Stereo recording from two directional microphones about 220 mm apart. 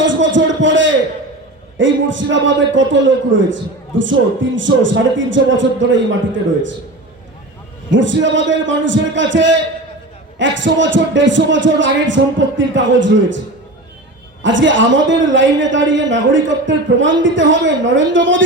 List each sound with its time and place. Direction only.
0.0 s a sound: 60° right (ahead or behind)
1.8 s a man's voice: 60° right (ahead or behind)
7.9 s a man's voice: 60° right (ahead or behind)
14.4 s a man's voice: 60° right (ahead or behind)